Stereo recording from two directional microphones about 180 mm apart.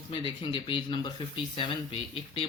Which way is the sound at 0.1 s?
30° left (ahead or behind).